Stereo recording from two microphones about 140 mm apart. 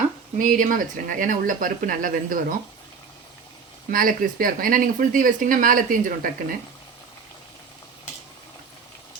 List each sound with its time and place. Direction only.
0.3 s speech: 70° right (ahead or behind)
3.9 s speech: 85° right